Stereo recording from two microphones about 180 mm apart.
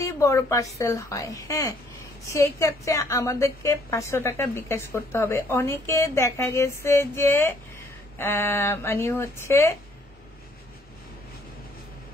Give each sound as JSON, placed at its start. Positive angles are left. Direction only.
{"t": 0.0, "sound": "a woman's voice", "side_deg": 15}